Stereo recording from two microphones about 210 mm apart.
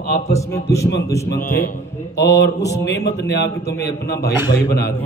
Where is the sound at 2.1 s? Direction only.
55° left (ahead or behind).